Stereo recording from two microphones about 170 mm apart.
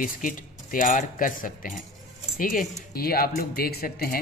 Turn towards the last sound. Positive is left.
turn(degrees=60)  # may be behind; listen again after turning